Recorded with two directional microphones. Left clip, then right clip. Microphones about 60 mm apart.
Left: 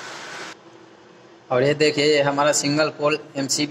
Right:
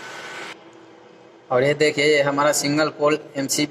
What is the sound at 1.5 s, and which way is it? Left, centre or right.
A man's voice, centre.